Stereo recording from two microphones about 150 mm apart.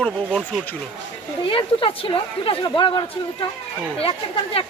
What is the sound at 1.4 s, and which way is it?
A woman's voice, 35° left (ahead or behind).